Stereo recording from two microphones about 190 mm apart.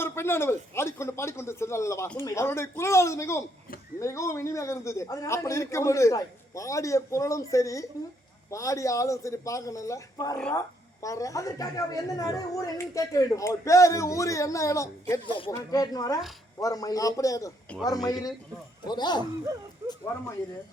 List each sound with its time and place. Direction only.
0.0 s a woman's voice: 10° left (ahead or behind)